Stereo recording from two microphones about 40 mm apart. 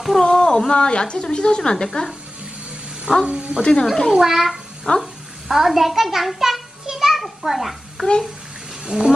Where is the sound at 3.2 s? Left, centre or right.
Right.